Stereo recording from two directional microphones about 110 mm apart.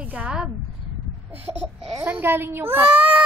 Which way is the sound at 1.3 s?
15° right (ahead or behind).